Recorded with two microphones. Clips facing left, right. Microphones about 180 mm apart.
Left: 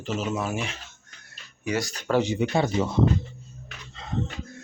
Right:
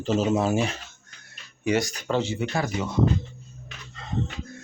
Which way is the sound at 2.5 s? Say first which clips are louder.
Left 4 dB; 25° left (ahead or behind).